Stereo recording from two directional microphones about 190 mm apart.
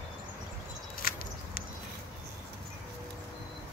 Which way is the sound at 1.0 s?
50° left (ahead or behind).